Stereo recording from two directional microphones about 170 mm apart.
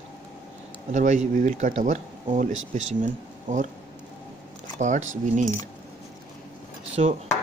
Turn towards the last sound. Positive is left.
turn(degrees=-40)  # may be behind; listen again after turning